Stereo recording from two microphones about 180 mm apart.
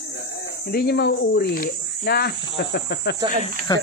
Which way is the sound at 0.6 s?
60° left (ahead or behind).